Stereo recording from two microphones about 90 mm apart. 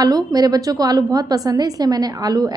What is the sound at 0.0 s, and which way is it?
A woman's voice, 45° right (ahead or behind).